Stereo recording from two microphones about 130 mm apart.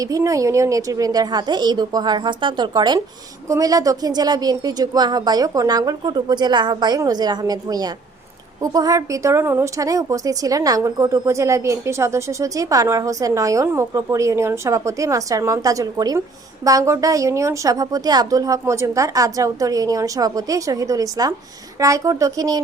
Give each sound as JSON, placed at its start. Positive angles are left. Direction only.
{"t": 0.0, "sound": "a woman's voice", "side_deg": -25}